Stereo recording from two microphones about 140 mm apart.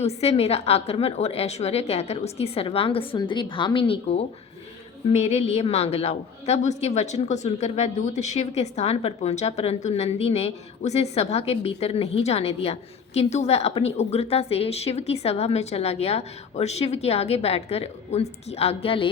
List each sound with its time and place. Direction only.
0.0 s a woman's voice: 50° left (ahead or behind)